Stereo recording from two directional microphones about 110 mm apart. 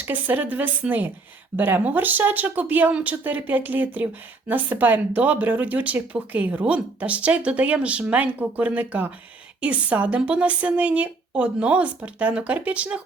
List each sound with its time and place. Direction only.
0.0 s speech: 15° right (ahead or behind)